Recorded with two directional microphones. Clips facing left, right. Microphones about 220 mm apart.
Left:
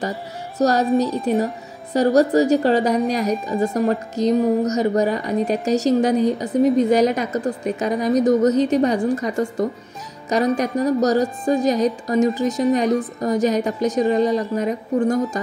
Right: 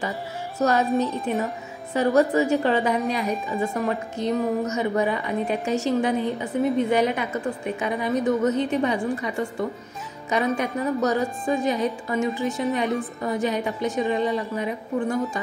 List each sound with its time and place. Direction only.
0.6 s a woman's voice: 40° left (ahead or behind)
0.8 s a woman's voice: centre (ahead or behind)
2.0 s a woman's voice: 40° left (ahead or behind)